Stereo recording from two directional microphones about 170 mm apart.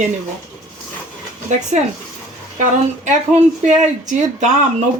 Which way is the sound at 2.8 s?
45° right (ahead or behind).